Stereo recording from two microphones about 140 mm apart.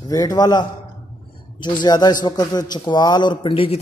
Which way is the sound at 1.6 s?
30° left (ahead or behind).